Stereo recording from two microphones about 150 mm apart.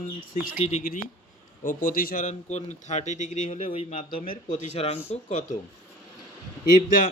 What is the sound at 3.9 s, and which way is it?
Speech, 60° left (ahead or behind).